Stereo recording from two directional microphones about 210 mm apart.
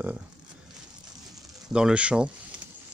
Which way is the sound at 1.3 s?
5° right (ahead or behind).